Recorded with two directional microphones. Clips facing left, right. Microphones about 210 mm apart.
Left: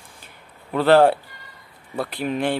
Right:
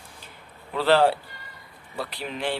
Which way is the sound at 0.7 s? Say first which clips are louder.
Left 5 dB; 50° left (ahead or behind).